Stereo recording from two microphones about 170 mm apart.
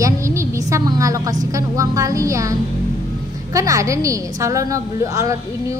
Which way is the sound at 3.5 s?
20° right (ahead or behind).